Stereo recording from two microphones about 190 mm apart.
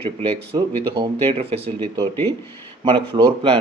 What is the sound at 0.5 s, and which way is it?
A man's voice, 25° right (ahead or behind).